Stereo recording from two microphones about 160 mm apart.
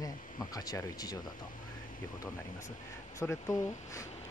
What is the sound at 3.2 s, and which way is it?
Speech, 20° left (ahead or behind).